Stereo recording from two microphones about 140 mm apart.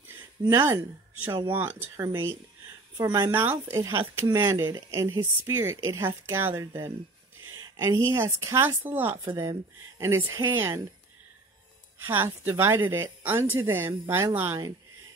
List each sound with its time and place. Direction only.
0.4 s speech: 30° right (ahead or behind)
1.5 s a woman's voice: 15° right (ahead or behind)
4.4 s a woman's voice: 25° right (ahead or behind)
12.1 s speech: 15° right (ahead or behind)